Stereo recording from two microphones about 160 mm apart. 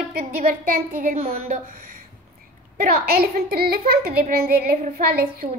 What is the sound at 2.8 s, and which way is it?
A woman's voice, 70° right (ahead or behind).